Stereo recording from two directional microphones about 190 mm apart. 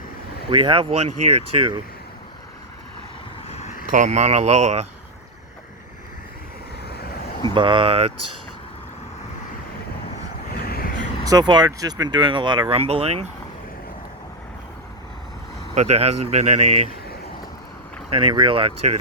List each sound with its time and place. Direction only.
0.5 s speech: 25° right (ahead or behind)
3.5 s vehicle: 40° left (ahead or behind)
3.9 s speech: 40° right (ahead or behind)
6.8 s vehicle: 55° left (ahead or behind)
7.5 s speech: 25° right (ahead or behind)
10.5 s vehicle: 55° left (ahead or behind)
11.3 s speech: 20° right (ahead or behind)
15.7 s speech: 35° right (ahead or behind)
18.1 s speech: 25° right (ahead or behind)